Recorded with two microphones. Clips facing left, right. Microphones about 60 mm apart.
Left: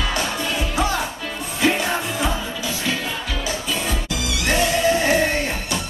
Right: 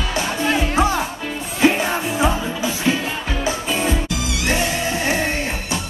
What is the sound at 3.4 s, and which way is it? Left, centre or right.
Music, right.